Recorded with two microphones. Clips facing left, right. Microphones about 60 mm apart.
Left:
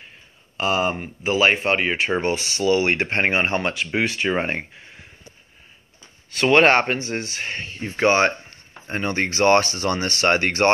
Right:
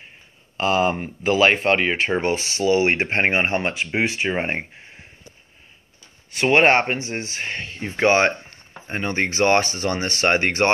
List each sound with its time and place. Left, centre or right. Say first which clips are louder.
0.6 s speech: right 2 dB; right
2.0 s speech: right 1 dB; right
6.3 s speech: left 1 dB; centre
7.4 s speech: even; right
7.9 s speech: even; right